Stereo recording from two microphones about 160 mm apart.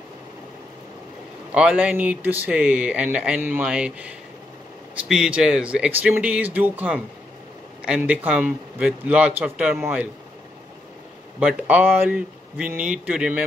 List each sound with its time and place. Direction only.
1.5 s speech: 5° right (ahead or behind)
11.3 s speech: 5° right (ahead or behind)